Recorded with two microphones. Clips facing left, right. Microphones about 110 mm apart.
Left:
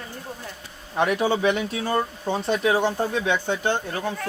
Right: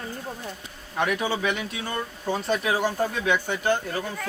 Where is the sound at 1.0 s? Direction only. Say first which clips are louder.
Left 4 dB; 30° left (ahead or behind).